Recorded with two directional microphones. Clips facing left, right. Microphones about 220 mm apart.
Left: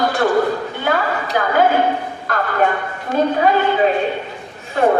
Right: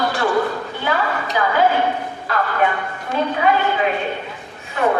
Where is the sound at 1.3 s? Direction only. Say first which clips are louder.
Left 2 dB; 50° left (ahead or behind).